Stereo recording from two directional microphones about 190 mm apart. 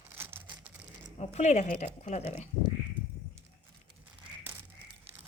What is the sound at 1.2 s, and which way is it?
Speech, 35° left (ahead or behind).